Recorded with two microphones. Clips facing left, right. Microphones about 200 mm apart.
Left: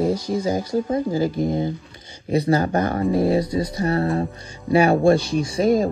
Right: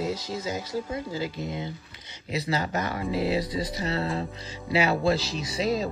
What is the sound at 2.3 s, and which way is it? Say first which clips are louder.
Speech: left 9 dB; 55° left (ahead or behind).